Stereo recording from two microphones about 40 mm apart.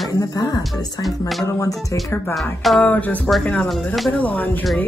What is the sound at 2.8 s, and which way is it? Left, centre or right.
Speech, left.